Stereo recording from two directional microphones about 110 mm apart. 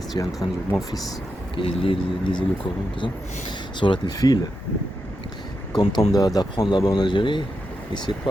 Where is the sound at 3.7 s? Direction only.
50° left (ahead or behind).